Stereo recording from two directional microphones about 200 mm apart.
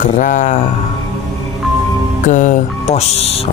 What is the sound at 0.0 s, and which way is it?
Speech, 40° left (ahead or behind).